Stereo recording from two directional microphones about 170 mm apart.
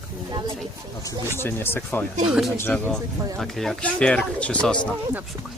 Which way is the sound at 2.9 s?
20° right (ahead or behind).